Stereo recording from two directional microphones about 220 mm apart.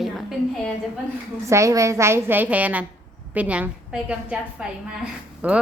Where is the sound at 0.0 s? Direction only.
Centre (ahead or behind).